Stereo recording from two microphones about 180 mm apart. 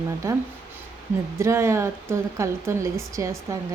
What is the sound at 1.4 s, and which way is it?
Speech, 15° right (ahead or behind).